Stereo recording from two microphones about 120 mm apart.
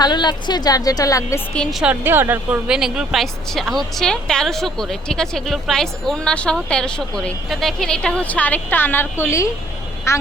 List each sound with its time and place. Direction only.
0.0 s a woman's voice: 35° left (ahead or behind)
1.8 s a woman's voice: 15° right (ahead or behind); by 10.2 s 25° left (ahead or behind)